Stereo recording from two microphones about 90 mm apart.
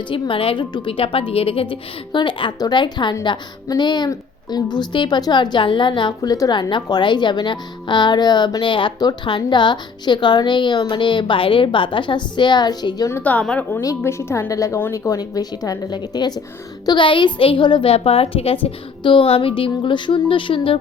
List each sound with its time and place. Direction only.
0.1 s a woman's voice: 80° left; by 2.5 s 65° left (ahead or behind)
2.6 s a woman's voice: 55° left (ahead or behind)
6.2 s a woman's voice: 40° left (ahead or behind)
6.5 s a woman's voice: 60° left (ahead or behind)
13.2 s a woman's voice: 15° left (ahead or behind)
13.8 s a woman's voice: 30° left (ahead or behind); by 16.4 s 50° left (ahead or behind)
16.8 s a woman's voice: 60° left (ahead or behind)